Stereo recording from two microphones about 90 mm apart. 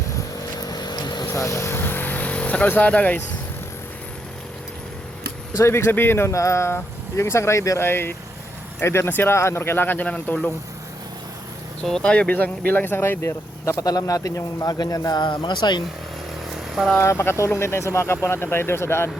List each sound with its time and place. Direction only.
0.6 s vehicle: 50° left (ahead or behind)
1.3 s vehicle: 35° left (ahead or behind); by 3.2 s 20° left (ahead or behind)
5.5 s speech: 30° left (ahead or behind); by 10.5 s 10° left (ahead or behind)
11.8 s speech: 5° left (ahead or behind); by 15.8 s 55° left (ahead or behind)
16.6 s vehicle: 5° right (ahead or behind)
17.0 s speech: 35° left (ahead or behind)